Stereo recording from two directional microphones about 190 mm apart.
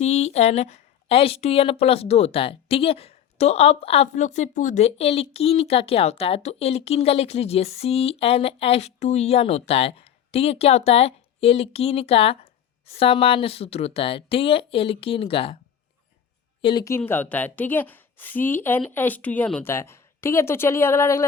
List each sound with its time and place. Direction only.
0.0 s a woman's voice: 35° left (ahead or behind)
16.6 s a woman's voice: 25° left (ahead or behind)
17.0 s a woman's voice: 10° left (ahead or behind)